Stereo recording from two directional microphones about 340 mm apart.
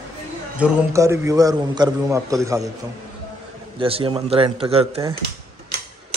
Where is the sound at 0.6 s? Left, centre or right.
Centre.